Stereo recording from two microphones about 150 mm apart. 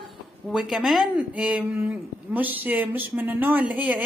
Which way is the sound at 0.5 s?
Centre (ahead or behind).